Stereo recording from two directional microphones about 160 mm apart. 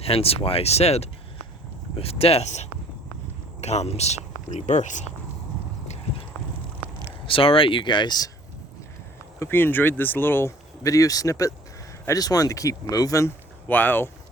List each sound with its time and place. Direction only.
0.0 s speech: 40° left (ahead or behind)
7.3 s speech: 35° left (ahead or behind)
9.4 s speech: 15° left (ahead or behind)